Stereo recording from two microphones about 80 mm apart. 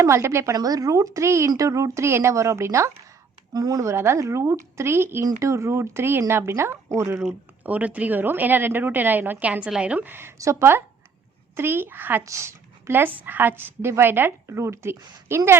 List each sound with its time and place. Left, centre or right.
0.0 s a woman's voice: right
0.5 s a woman's voice: right
3.5 s a woman's voice: right
7.6 s a woman's voice: centre
10.3 s a woman's voice: right
12.2 s a woman's voice: right